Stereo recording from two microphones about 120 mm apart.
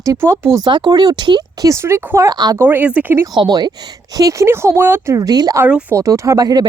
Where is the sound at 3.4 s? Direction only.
35° right (ahead or behind); by 5.2 s 20° right (ahead or behind).